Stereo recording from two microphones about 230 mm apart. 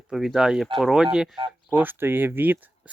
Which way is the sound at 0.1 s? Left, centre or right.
Centre.